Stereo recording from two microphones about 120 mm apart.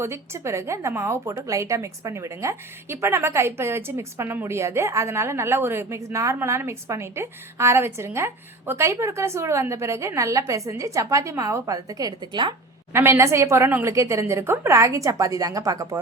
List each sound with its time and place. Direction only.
0.0 s a woman's voice: 25° right (ahead or behind); by 12.5 s 40° right (ahead or behind)
12.9 s a woman's voice: 20° right (ahead or behind)